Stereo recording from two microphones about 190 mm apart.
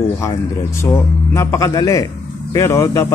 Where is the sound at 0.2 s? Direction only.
15° left (ahead or behind).